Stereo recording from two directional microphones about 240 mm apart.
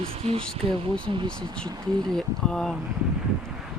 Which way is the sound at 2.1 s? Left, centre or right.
Centre.